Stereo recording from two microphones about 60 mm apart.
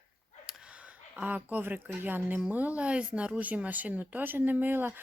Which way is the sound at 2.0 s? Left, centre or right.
Right.